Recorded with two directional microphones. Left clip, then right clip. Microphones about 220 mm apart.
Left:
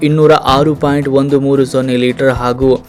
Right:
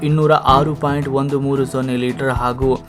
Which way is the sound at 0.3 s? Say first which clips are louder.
Left 2 dB; 10° left (ahead or behind).